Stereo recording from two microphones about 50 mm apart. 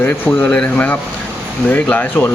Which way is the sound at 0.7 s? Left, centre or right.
Left.